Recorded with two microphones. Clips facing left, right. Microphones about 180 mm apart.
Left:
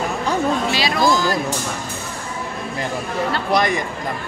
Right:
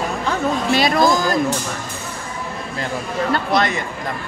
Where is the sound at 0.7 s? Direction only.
50° right (ahead or behind).